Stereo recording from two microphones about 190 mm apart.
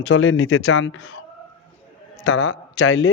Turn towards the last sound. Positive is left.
turn(degrees=90)